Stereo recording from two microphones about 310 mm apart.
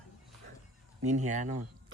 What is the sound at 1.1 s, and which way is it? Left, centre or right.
Speech, right.